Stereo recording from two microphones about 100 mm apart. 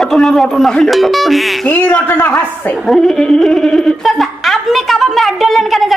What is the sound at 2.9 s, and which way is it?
A woman's voice, 5° left (ahead or behind).